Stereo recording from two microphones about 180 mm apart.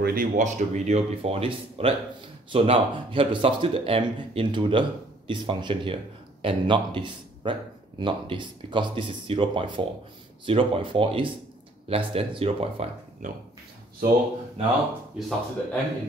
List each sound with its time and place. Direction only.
0.0 s speech: 50° right (ahead or behind); by 12.8 s 30° right (ahead or behind)
13.2 s speech: 45° right (ahead or behind)
15.1 s speech: centre (ahead or behind)